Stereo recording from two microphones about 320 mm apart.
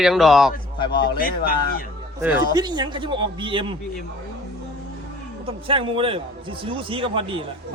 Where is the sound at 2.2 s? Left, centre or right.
Centre.